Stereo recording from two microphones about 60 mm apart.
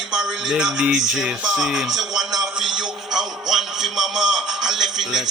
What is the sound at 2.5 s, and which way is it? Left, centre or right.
Music, centre.